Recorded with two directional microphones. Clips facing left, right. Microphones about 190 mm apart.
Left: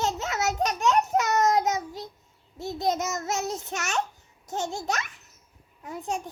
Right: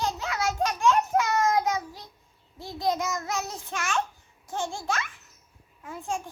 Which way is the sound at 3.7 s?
45° left (ahead or behind).